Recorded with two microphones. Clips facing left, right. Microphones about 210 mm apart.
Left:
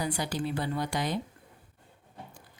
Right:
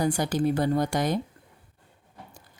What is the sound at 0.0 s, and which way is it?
A woman's voice, 45° right (ahead or behind).